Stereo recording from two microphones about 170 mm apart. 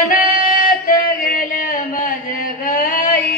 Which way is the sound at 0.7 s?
55° left (ahead or behind).